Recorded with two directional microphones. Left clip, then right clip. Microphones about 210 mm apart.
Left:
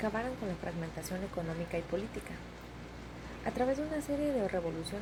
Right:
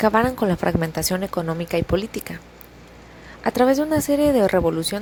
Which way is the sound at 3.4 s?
50° right (ahead or behind).